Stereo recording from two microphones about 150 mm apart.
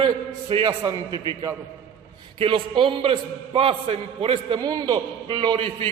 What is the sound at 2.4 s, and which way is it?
A man's voice, 35° right (ahead or behind).